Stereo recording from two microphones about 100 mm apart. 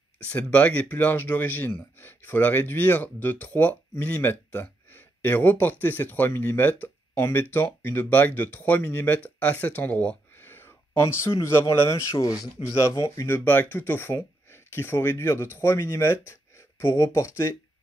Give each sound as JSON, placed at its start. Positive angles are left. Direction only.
{"t": 0.3, "sound": "speech", "side_deg": 15}